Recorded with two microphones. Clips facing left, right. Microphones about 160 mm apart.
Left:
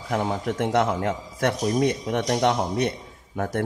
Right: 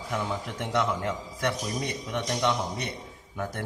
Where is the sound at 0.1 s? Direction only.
50° left (ahead or behind).